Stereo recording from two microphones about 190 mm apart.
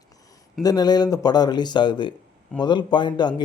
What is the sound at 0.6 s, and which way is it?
Speech, 20° left (ahead or behind).